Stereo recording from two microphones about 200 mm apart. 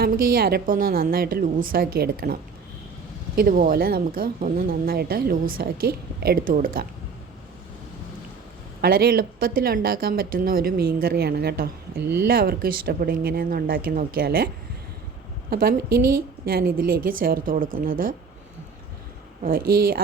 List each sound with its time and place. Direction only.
0.0 s speech: 45° right (ahead or behind)
8.8 s speech: 50° right (ahead or behind)
19.4 s speech: 45° right (ahead or behind)